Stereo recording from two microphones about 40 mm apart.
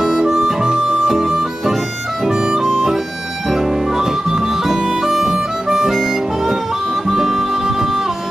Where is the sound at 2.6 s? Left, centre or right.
Centre.